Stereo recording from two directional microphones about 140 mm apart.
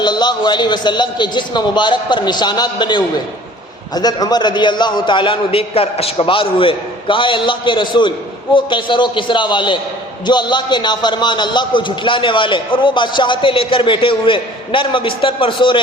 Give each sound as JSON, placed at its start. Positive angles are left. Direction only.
{"t": 0.0, "sound": "a man's voice", "side_deg": 30}